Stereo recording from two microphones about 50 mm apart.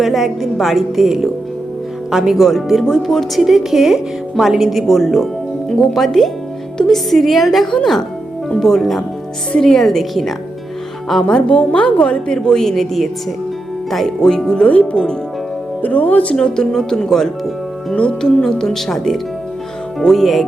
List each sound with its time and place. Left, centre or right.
0.0 s speech: centre
11.3 s a woman's voice: left; by 13.1 s centre
14.2 s speech: centre; by 16.3 s left
16.3 s speech: centre
17.9 s speech: centre